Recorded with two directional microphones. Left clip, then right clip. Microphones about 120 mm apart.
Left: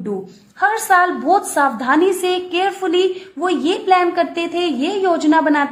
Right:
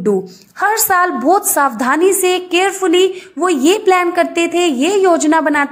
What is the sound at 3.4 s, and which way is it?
A woman's voice, 30° right (ahead or behind).